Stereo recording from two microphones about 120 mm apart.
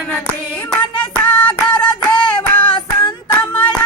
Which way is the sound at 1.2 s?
10° left (ahead or behind).